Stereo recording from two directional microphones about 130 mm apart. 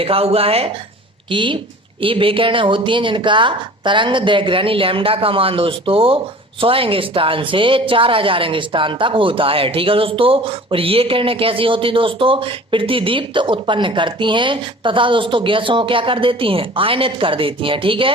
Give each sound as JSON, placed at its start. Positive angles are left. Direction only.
{"t": 0.0, "sound": "a woman's voice", "side_deg": -45}